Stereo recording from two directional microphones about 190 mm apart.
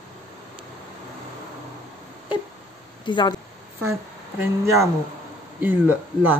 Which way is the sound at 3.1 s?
25° left (ahead or behind).